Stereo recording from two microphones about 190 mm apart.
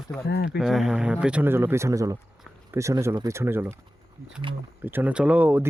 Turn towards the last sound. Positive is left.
turn(degrees=-10)  # may be behind; listen again after turning